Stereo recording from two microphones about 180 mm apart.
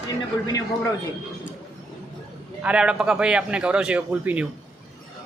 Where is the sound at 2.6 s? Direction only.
5° right (ahead or behind).